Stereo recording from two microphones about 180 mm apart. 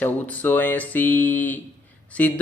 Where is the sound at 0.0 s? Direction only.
10° left (ahead or behind).